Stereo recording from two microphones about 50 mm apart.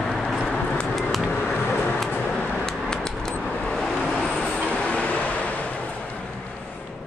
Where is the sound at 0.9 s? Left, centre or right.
Centre.